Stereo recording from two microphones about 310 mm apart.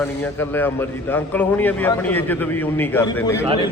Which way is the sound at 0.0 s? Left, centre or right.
Centre.